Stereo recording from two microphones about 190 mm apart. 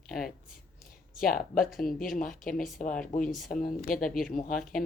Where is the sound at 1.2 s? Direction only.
50° left (ahead or behind).